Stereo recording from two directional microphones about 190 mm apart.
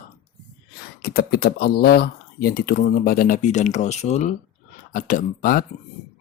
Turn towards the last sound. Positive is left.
turn(degrees=45)  # may be behind; listen again after turning